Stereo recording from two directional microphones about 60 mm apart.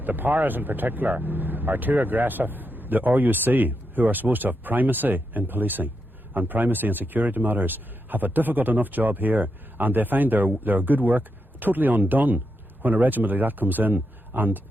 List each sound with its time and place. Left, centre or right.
0.0 s speech: right